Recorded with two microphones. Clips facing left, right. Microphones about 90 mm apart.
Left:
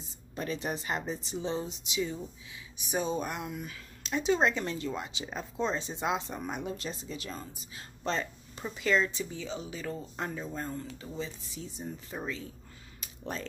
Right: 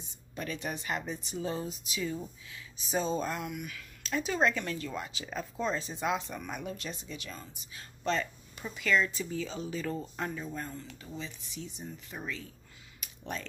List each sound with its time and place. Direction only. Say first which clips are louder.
0.4 s speech: left 3 dB; 30° left (ahead or behind)
10.7 s speech: left 4 dB; 40° left (ahead or behind)
13.0 s a sound: left 1 dB; 30° left (ahead or behind)